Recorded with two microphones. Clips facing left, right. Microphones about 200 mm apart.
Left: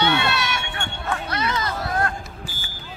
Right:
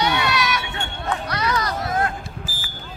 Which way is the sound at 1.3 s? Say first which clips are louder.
Right 2 dB; 25° left (ahead or behind).